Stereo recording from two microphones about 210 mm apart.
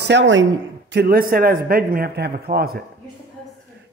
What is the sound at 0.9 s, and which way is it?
A man's voice, 45° right (ahead or behind).